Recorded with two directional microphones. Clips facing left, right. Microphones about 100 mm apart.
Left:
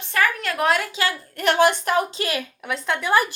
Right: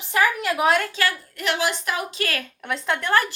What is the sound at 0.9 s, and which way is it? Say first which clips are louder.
Speech: even; 20° left (ahead or behind).